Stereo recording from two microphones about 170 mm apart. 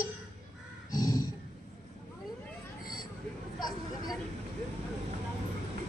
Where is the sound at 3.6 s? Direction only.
25° left (ahead or behind).